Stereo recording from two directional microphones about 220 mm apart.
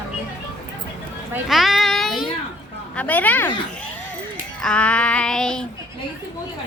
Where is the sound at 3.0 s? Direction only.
5° left (ahead or behind).